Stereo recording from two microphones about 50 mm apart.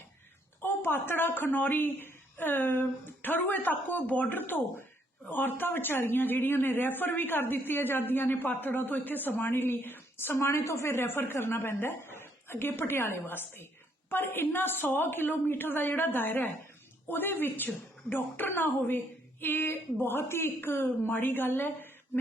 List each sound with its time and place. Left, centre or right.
0.6 s a woman's voice: left
21.1 s a woman's voice: left